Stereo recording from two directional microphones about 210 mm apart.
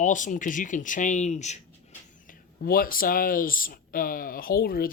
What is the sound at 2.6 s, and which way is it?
Speech, 45° left (ahead or behind).